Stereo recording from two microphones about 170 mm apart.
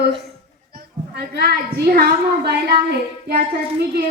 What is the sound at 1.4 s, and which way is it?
A woman's voice, 65° right (ahead or behind).